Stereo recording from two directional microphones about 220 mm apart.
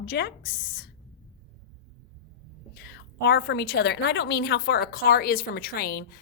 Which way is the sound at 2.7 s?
50° left (ahead or behind).